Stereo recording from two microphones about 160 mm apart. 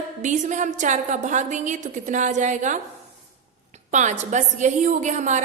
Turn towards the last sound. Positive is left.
turn(degrees=-50)  # may be behind; listen again after turning